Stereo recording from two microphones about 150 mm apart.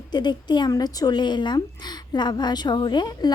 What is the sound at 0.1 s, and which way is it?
Speech, 30° left (ahead or behind).